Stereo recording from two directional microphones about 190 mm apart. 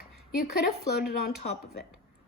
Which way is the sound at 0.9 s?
55° left (ahead or behind).